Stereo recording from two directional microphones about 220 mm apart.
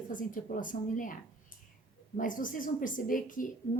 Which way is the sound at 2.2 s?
35° left (ahead or behind).